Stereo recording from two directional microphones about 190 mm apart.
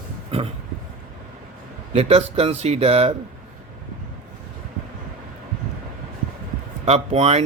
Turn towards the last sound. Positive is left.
turn(degrees=-35)  # may be behind; listen again after turning